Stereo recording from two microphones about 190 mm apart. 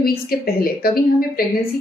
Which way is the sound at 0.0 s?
50° left (ahead or behind).